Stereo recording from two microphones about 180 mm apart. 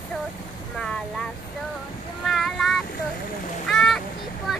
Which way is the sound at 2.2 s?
Centre (ahead or behind).